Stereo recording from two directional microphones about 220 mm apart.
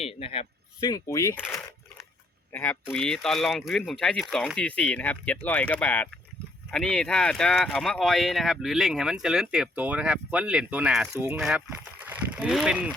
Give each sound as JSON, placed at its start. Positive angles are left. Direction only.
{"t": 0.0, "sound": "speech", "side_deg": 25}